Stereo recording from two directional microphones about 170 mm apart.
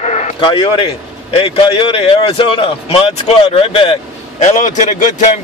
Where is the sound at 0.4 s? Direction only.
30° left (ahead or behind).